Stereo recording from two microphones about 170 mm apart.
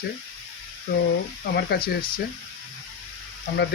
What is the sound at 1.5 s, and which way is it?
Speech, 65° left (ahead or behind).